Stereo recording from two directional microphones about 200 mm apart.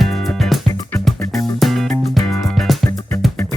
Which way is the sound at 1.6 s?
Centre (ahead or behind).